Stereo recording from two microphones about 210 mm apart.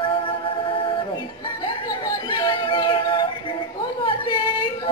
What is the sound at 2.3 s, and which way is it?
Music, 20° left (ahead or behind).